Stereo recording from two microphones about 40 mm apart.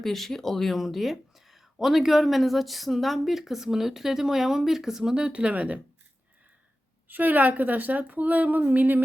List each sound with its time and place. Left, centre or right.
0.0 s speech: centre
5.1 s speech: right
7.1 s a woman's voice: right